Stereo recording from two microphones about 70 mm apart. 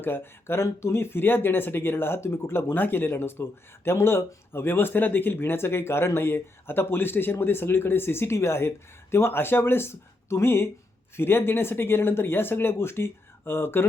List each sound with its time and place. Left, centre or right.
0.0 s speech: left